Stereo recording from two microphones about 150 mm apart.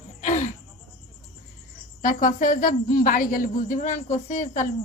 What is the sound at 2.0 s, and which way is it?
A woman's voice, 60° left (ahead or behind).